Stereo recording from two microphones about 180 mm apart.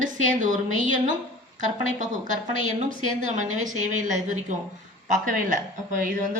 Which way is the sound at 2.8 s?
40° right (ahead or behind).